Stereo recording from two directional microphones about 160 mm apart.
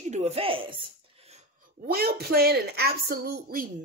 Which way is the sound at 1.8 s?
75° right (ahead or behind).